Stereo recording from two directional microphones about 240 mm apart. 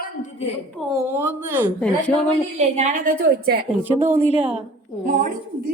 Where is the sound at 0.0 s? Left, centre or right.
Left.